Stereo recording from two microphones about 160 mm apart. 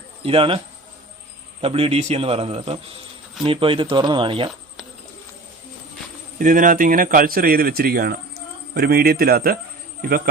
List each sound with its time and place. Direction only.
0.2 s speech: 35° right (ahead or behind)
1.6 s a man's voice: 35° right (ahead or behind)
6.4 s speech: 55° right (ahead or behind)